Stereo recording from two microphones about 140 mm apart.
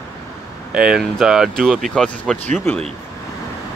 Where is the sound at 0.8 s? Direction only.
5° right (ahead or behind).